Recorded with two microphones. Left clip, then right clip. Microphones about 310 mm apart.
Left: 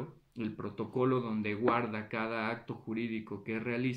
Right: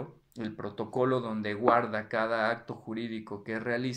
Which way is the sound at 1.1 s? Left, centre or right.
Centre.